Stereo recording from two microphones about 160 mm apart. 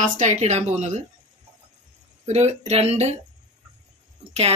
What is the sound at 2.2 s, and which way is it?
Speech, 45° right (ahead or behind).